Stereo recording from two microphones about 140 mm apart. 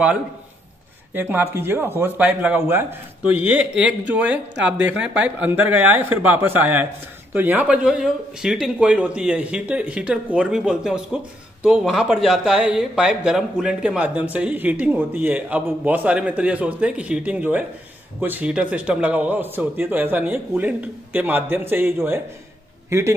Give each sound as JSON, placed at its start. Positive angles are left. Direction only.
{"t": 1.1, "sound": "a man's voice", "side_deg": -15}